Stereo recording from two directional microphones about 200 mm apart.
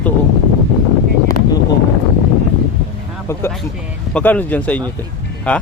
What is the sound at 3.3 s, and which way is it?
A man's voice, 15° left (ahead or behind).